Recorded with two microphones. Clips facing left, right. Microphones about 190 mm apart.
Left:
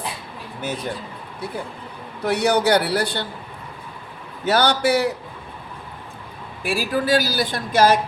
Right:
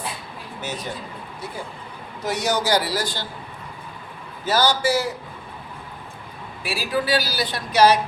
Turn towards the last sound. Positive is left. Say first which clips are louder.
# even
turn(degrees=50)  # may be behind; listen again after turning